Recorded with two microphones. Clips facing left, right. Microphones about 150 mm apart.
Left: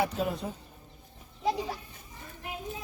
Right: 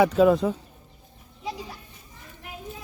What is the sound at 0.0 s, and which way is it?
Speech, 90° right.